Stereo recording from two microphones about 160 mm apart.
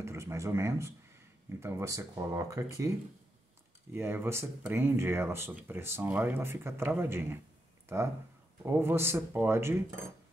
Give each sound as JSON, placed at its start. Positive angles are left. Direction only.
{"t": 0.0, "sound": "speech", "side_deg": -15}
{"t": 3.9, "sound": "speech", "side_deg": -15}